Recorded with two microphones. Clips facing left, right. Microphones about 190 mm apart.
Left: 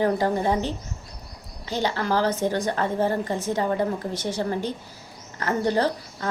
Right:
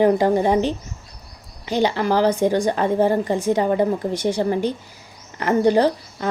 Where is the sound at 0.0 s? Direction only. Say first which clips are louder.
Right 6 dB; 15° right (ahead or behind).